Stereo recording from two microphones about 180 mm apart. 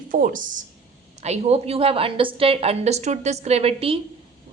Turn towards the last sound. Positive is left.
turn(degrees=-30)  # may be behind; listen again after turning